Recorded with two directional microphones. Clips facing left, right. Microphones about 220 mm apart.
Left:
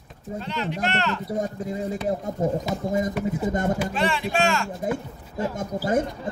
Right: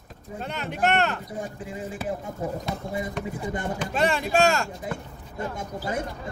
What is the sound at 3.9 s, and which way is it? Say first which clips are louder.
Speech: right 1 dB; 45° right (ahead or behind).